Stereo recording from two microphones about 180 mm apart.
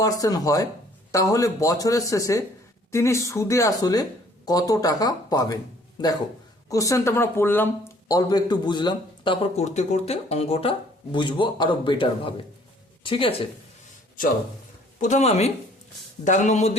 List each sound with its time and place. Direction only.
0.0 s speech: 20° left (ahead or behind)
6.7 s speech: 20° left (ahead or behind)
14.9 s speech: 40° left (ahead or behind)